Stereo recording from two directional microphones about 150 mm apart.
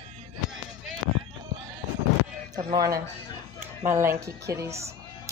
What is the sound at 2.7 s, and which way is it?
A woman's voice, 25° right (ahead or behind).